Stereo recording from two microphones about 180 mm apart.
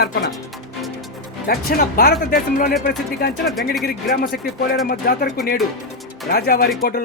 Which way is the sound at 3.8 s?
55° left (ahead or behind).